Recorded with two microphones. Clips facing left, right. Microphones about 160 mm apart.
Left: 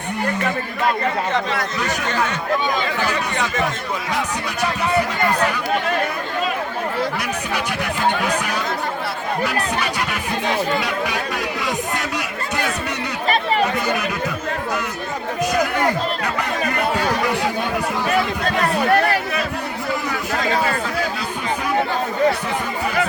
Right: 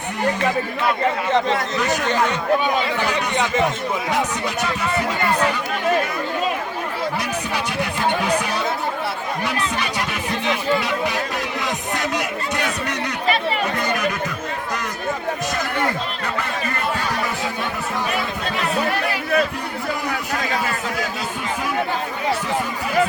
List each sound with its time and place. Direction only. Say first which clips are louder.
3.3 s a man's voice: right 3 dB; 20° right (ahead or behind)
13.2 s chatter: left 3 dB; 40° left (ahead or behind)
18.5 s a sound: left 5 dB; 40° left (ahead or behind)